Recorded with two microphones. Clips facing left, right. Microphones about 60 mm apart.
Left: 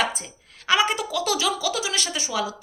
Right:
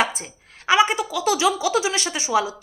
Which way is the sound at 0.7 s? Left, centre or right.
Centre.